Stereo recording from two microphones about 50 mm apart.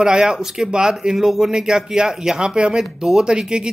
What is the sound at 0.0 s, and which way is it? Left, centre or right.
Speech, centre.